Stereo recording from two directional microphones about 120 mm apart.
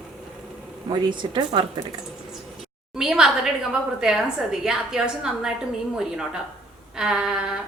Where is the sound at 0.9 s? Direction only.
40° right (ahead or behind).